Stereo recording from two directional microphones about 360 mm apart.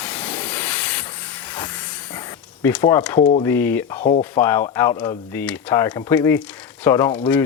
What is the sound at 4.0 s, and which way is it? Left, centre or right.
Speech, centre.